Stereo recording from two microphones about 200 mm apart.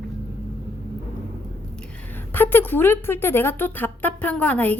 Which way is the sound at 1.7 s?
5° left (ahead or behind).